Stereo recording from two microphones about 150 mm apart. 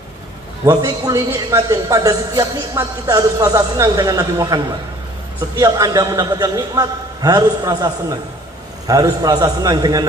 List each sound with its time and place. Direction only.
0.7 s a man's voice: 20° right (ahead or behind)
5.6 s a man's voice: 25° right (ahead or behind)